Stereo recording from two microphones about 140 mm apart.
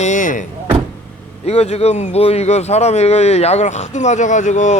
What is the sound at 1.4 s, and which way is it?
Speech, 50° left (ahead or behind).